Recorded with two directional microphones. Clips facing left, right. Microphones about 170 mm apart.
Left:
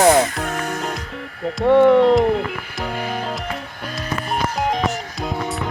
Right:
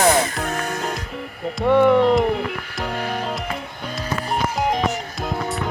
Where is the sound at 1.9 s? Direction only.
Centre (ahead or behind).